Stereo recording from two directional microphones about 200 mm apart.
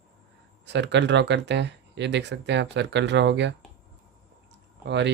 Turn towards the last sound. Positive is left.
turn(degrees=-60)  # may be behind; listen again after turning